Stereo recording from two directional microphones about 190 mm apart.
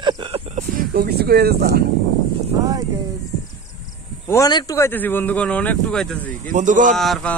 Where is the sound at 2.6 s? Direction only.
20° right (ahead or behind).